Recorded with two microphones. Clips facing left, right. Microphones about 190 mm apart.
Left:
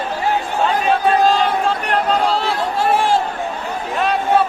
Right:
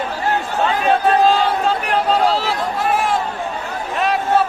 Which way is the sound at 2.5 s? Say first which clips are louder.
Left 2 dB; 30° left (ahead or behind).